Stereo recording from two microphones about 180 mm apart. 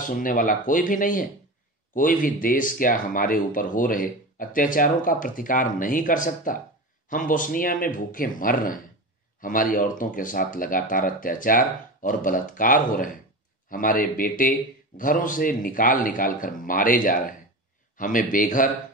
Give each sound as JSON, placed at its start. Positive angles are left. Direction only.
{"t": 0.0, "sound": "speech", "side_deg": 50}